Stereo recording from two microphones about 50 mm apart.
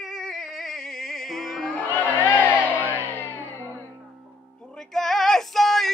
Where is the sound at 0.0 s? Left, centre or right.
Centre.